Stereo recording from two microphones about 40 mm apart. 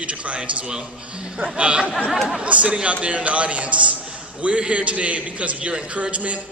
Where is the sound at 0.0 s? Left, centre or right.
Right.